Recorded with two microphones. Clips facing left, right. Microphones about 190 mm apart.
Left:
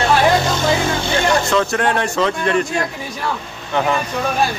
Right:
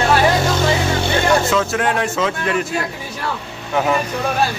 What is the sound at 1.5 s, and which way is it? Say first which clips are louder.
Speech: left 1 dB; 5° right (ahead or behind).